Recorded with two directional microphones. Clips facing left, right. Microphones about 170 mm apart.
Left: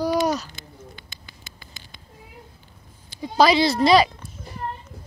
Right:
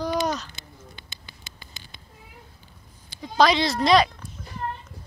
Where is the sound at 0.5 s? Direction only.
25° right (ahead or behind).